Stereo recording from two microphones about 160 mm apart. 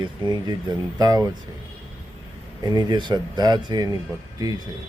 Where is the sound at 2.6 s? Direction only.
25° right (ahead or behind).